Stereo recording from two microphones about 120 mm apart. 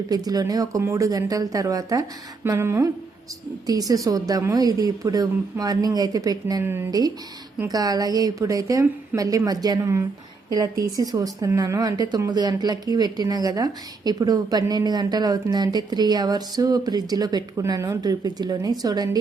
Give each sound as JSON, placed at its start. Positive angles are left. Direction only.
{"t": 0.1, "sound": "a woman's voice", "side_deg": -30}
{"t": 2.4, "sound": "a sound", "side_deg": -20}
{"t": 3.7, "sound": "a woman's voice", "side_deg": -30}